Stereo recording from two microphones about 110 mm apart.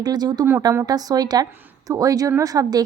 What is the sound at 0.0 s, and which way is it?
Speech, 40° right (ahead or behind).